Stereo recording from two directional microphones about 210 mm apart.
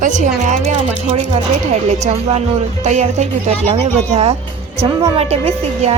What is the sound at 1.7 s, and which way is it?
A woman's voice, 30° right (ahead or behind).